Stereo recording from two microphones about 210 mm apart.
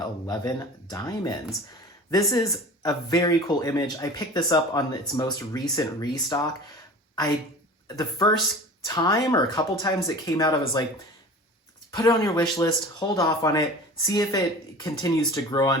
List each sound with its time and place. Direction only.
0.0 s speech: 20° left (ahead or behind)
7.9 s speech: 20° left (ahead or behind)
11.9 s speech: 15° left (ahead or behind)